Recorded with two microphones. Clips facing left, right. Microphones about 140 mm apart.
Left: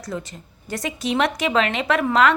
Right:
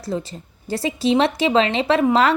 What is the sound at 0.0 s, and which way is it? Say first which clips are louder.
A woman's voice: right 4 dB; 30° right (ahead or behind).